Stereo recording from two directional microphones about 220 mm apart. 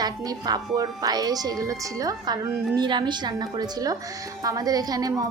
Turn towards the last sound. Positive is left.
turn(degrees=-15)  # may be behind; listen again after turning